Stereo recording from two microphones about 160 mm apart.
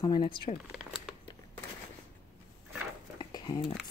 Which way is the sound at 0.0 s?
30° left (ahead or behind).